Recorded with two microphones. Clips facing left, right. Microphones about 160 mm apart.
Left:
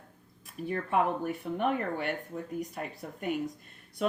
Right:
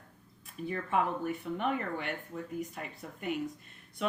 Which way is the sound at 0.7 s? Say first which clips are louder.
Left 3 dB; 50° left (ahead or behind).